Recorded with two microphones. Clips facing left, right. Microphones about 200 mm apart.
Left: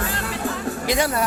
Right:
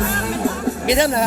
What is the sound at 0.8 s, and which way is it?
Speech, 25° right (ahead or behind).